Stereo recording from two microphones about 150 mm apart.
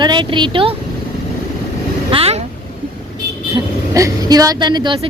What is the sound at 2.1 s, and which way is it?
Boat, 45° right (ahead or behind).